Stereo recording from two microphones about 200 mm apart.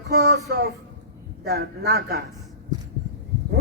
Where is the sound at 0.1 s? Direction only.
55° right (ahead or behind).